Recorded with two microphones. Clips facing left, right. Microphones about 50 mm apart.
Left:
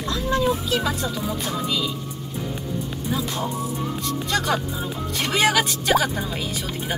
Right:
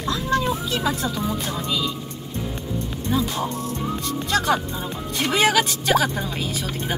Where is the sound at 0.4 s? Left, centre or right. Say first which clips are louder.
Left 2 dB; centre.